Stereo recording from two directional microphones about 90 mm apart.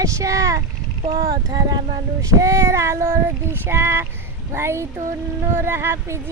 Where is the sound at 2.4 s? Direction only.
35° right (ahead or behind).